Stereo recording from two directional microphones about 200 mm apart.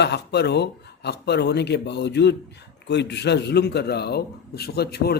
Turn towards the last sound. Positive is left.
turn(degrees=55)  # may be behind; listen again after turning